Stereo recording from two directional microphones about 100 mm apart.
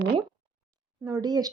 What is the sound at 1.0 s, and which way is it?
Speech, 35° right (ahead or behind).